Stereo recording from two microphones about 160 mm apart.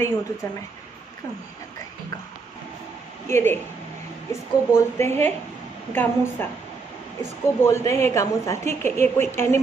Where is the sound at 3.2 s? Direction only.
15° left (ahead or behind).